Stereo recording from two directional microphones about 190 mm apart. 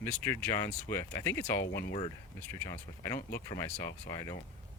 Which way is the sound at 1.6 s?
60° left (ahead or behind).